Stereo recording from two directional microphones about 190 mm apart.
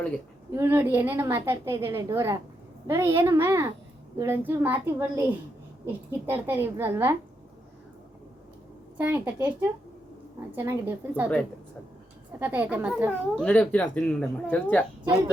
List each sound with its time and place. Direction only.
0.5 s a woman's voice: 15° right (ahead or behind)
9.0 s a woman's voice: 10° right (ahead or behind)
10.5 s a woman's voice: 10° right (ahead or behind)
12.4 s a woman's voice: 10° right (ahead or behind)
13.3 s speech: 5° left (ahead or behind)